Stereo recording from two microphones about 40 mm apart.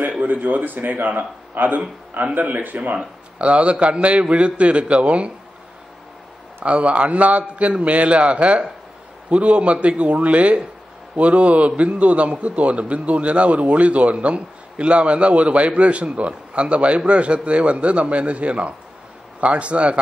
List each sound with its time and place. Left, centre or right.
0.0 s a man's voice: right
3.0 s a man's voice: right
6.6 s a man's voice: right